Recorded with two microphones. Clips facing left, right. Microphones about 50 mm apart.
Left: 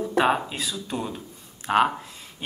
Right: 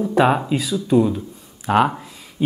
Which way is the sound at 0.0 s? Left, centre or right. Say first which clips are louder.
Right 5 dB; centre.